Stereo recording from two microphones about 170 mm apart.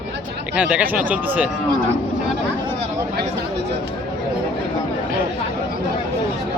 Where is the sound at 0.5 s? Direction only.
10° right (ahead or behind).